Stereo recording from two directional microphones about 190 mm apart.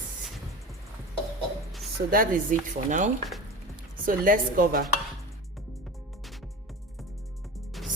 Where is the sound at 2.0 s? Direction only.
45° right (ahead or behind).